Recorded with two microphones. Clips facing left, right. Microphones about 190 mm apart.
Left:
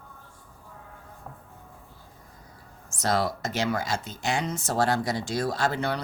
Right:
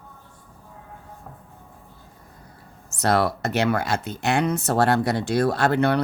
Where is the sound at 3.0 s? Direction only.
60° right (ahead or behind).